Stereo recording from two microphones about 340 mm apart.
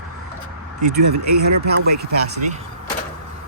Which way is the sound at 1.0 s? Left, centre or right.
Right.